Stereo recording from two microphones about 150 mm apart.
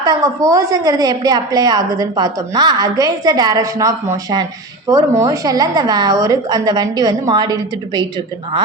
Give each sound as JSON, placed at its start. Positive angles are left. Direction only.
{"t": 0.0, "sound": "a woman's voice", "side_deg": -25}